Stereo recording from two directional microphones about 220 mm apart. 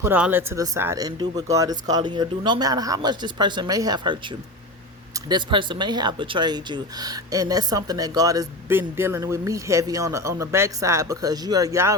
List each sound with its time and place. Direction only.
0.0 s speech: 10° right (ahead or behind)
5.3 s speech: 20° right (ahead or behind)